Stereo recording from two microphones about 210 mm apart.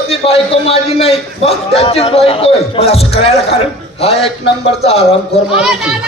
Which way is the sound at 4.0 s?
30° left (ahead or behind).